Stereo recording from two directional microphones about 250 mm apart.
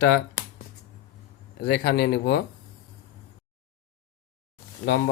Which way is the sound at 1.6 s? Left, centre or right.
Left.